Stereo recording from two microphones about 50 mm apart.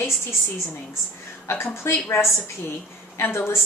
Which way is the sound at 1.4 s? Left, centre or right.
Left.